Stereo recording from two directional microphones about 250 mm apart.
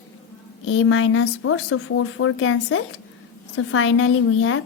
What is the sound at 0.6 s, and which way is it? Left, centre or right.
Speech, left.